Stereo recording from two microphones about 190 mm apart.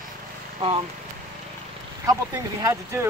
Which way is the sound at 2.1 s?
20° right (ahead or behind).